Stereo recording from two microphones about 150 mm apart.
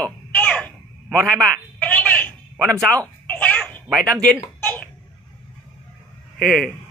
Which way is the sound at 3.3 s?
10° left (ahead or behind).